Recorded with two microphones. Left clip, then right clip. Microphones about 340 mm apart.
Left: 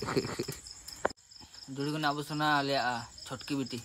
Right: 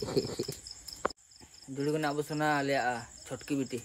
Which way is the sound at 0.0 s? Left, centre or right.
Left.